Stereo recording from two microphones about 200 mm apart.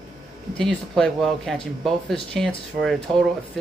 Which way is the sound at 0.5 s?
5° left (ahead or behind).